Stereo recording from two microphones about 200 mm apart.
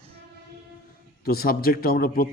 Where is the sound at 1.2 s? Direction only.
50° left (ahead or behind).